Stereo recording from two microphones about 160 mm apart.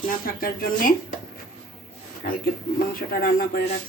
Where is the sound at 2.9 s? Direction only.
65° left (ahead or behind).